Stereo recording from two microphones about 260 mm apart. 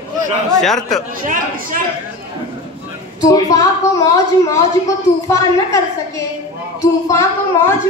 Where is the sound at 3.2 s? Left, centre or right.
Centre.